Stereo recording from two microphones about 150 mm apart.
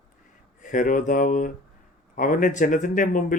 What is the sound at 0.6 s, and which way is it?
Speech, 60° left (ahead or behind).